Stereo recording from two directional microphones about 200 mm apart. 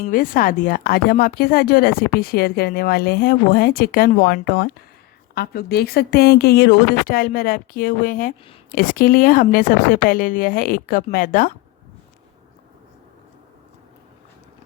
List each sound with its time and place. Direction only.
0.0 s speech: 45° left (ahead or behind)